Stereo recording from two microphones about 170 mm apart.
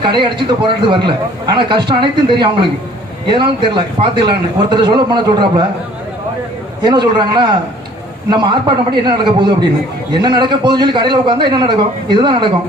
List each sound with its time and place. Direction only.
0.0 s a man's voice: 25° right (ahead or behind)
6.8 s a man's voice: 25° right (ahead or behind)